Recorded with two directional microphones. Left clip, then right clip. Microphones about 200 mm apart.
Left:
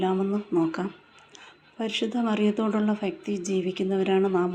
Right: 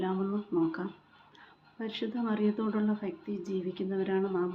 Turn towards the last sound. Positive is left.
turn(degrees=25)  # may be behind; listen again after turning